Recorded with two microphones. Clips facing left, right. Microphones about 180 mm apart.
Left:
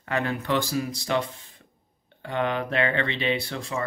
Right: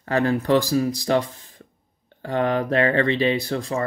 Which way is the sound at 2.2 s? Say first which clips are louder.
Right 5 dB; 40° right (ahead or behind).